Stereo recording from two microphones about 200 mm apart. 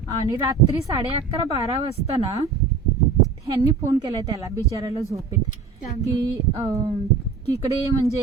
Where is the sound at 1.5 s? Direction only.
30° right (ahead or behind).